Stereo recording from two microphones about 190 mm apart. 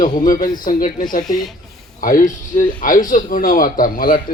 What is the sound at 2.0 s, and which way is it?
Speech, 45° left (ahead or behind).